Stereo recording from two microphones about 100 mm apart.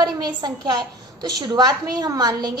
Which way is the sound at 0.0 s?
45° right (ahead or behind).